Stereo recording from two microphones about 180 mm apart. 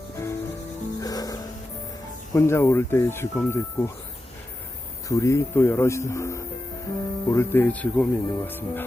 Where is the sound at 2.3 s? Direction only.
15° left (ahead or behind).